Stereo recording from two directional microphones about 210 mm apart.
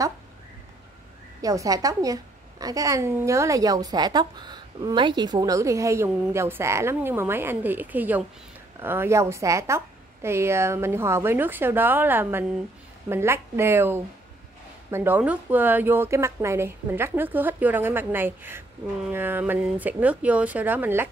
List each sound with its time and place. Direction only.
1.4 s speech: 15° right (ahead or behind)